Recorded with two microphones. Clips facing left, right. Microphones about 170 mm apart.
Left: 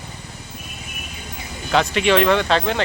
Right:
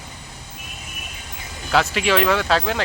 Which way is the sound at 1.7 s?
Centre (ahead or behind).